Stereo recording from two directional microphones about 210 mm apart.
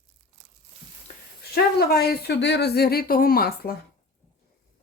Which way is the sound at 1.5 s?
50° left (ahead or behind).